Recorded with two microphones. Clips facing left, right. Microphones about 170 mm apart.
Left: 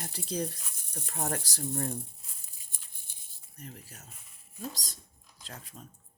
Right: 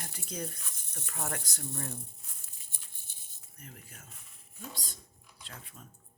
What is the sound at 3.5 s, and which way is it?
Speech, 35° left (ahead or behind).